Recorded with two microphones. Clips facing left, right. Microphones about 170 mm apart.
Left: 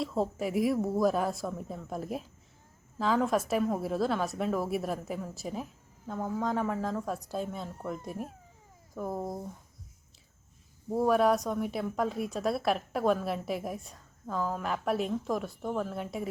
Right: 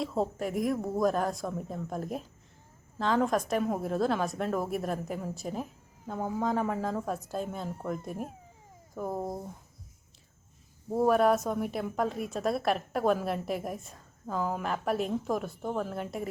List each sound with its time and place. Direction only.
0.0 s speech: centre (ahead or behind)
10.8 s speech: centre (ahead or behind)